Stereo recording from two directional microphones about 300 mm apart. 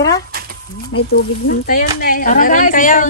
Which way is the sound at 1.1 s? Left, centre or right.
Left.